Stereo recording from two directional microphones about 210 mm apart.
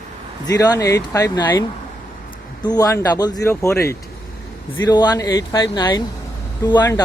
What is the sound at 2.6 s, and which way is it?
Speech, 15° left (ahead or behind).